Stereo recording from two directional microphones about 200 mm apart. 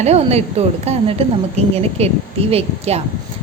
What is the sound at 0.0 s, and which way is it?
A woman's voice, 35° right (ahead or behind).